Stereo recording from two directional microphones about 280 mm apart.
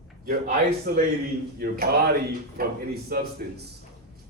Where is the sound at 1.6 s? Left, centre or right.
Right.